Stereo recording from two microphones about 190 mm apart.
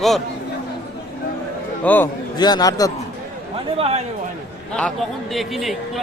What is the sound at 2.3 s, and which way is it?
Speech, 20° left (ahead or behind).